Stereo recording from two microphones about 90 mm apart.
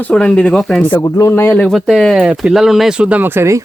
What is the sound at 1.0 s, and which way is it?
Speech, 35° left (ahead or behind).